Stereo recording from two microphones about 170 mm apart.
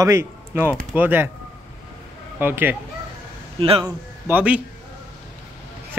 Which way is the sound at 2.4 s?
10° right (ahead or behind).